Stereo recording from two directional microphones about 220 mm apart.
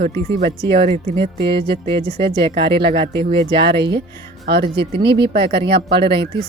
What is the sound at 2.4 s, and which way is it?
Speech, 45° right (ahead or behind).